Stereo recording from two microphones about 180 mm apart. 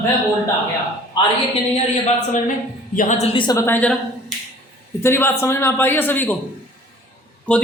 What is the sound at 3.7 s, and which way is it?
A woman's voice, 5° left (ahead or behind).